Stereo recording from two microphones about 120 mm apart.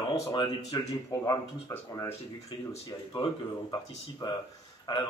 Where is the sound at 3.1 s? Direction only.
35° left (ahead or behind).